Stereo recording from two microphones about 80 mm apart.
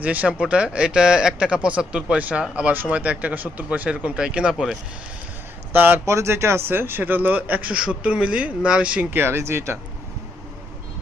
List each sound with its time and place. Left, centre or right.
0.0 s speech: centre
5.7 s speech: right
6.1 s speech: right